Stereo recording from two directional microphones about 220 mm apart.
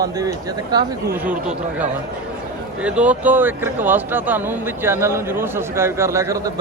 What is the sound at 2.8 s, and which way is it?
Speech, 5° right (ahead or behind).